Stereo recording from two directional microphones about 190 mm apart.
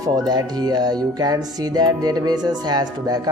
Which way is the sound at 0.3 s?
20° right (ahead or behind).